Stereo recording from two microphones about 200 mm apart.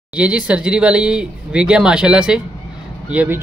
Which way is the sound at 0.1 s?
5° right (ahead or behind).